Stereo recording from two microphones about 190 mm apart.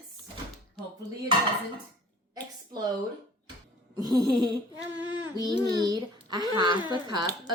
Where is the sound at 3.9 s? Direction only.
20° right (ahead or behind).